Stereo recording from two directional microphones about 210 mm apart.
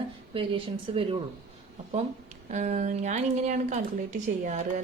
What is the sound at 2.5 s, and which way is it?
A woman's voice, 35° right (ahead or behind).